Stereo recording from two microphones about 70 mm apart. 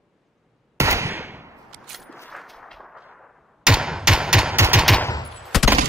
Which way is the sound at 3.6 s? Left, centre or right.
Centre.